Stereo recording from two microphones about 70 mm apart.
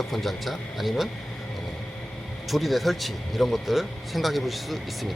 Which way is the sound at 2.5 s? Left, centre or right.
Centre.